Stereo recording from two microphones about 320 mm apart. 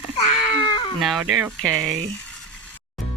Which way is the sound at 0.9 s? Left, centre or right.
Centre.